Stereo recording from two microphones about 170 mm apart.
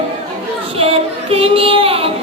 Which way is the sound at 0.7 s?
35° right (ahead or behind).